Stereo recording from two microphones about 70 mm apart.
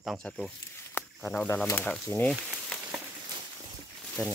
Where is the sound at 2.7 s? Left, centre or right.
Centre.